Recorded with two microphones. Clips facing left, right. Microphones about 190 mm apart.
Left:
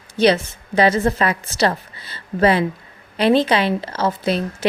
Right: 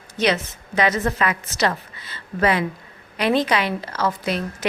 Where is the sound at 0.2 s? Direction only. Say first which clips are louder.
Left 6 dB; 30° left (ahead or behind).